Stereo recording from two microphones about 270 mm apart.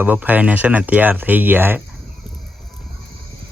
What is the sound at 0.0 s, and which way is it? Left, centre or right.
Speech, centre.